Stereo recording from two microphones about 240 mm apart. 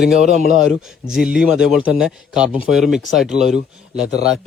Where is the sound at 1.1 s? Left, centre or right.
Centre.